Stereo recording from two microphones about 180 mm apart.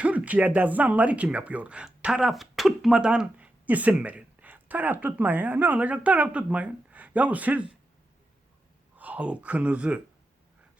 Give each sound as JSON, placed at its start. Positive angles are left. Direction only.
{"t": 0.0, "sound": "speech", "side_deg": -10}
{"t": 9.0, "sound": "speech", "side_deg": -10}